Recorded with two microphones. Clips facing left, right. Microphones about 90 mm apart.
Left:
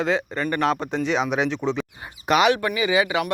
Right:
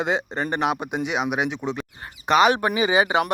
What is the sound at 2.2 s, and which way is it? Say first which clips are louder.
Speech: right 1 dB; 35° right (ahead or behind).